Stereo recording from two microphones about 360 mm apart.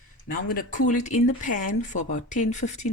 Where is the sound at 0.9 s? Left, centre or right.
Left.